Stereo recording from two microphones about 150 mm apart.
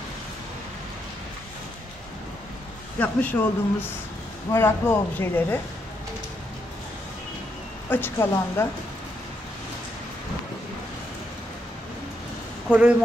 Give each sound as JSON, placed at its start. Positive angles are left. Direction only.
{"t": 3.0, "sound": "a woman's voice", "side_deg": 10}
{"t": 7.9, "sound": "a woman's voice", "side_deg": 15}
{"t": 12.7, "sound": "speech", "side_deg": -10}